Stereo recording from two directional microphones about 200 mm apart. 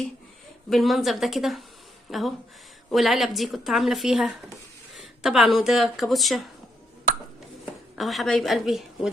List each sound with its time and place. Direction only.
0.7 s speech: centre (ahead or behind)
7.9 s speech: centre (ahead or behind)